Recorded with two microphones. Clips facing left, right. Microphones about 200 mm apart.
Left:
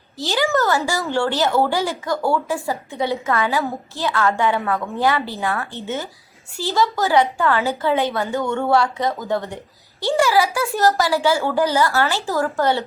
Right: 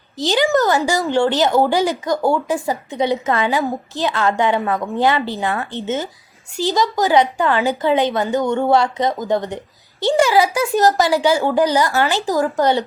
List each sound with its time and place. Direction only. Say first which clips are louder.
0.2 s a woman's voice: right 4 dB; 20° right (ahead or behind)